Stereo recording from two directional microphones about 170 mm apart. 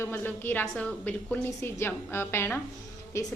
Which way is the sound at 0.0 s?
15° left (ahead or behind).